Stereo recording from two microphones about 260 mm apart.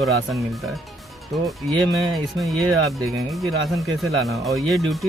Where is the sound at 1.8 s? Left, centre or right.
Centre.